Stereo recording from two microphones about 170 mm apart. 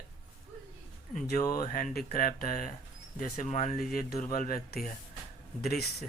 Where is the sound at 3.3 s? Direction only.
45° left (ahead or behind).